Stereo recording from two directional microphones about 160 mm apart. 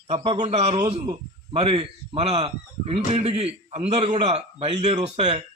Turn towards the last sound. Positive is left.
turn(degrees=-40)  # may be behind; listen again after turning